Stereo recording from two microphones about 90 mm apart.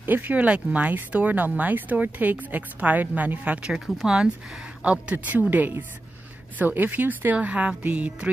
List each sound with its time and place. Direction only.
0.0 s speech: 20° right (ahead or behind)